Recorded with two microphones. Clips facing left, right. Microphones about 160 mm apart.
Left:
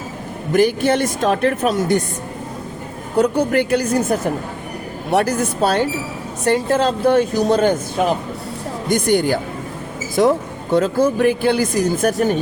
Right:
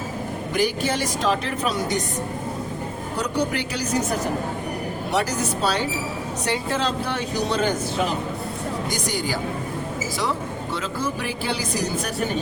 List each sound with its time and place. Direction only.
0.5 s speech: 55° left (ahead or behind)
3.2 s a woman's voice: 55° left (ahead or behind)
5.1 s speech: 55° left (ahead or behind)
8.9 s a woman's voice: 55° left (ahead or behind)